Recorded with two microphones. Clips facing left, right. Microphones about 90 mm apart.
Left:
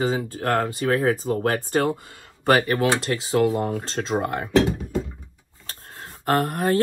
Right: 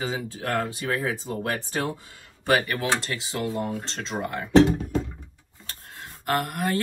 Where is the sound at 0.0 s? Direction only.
45° left (ahead or behind).